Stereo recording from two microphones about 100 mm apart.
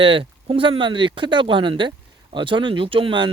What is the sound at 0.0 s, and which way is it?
Speech, 60° right (ahead or behind).